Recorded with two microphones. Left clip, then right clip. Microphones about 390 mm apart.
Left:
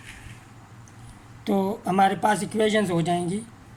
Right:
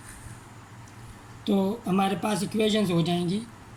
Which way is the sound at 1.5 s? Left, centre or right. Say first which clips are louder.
Left 2 dB; centre.